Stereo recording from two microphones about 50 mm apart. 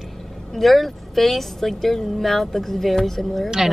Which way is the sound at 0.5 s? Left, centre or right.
Centre.